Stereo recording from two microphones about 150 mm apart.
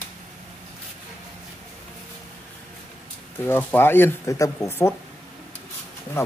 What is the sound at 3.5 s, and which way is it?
Speech, 15° left (ahead or behind).